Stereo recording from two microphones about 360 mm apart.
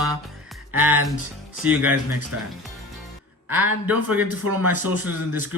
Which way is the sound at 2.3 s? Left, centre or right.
Right.